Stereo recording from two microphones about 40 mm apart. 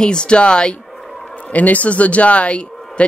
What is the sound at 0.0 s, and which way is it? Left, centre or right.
Speech, left.